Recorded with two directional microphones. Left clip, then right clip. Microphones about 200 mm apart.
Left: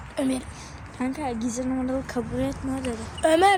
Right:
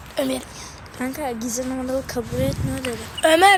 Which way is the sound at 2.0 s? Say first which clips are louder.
Right 4 dB; 40° left (ahead or behind).